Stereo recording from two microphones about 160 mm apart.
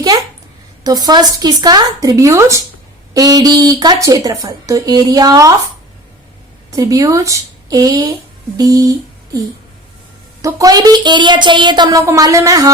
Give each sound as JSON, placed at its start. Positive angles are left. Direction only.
{"t": 0.9, "sound": "speech", "side_deg": -25}
{"t": 6.7, "sound": "speech", "side_deg": -20}
{"t": 10.4, "sound": "speech", "side_deg": -20}